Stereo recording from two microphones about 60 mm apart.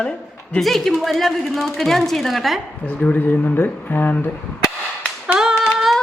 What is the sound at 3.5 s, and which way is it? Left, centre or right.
Speech, left.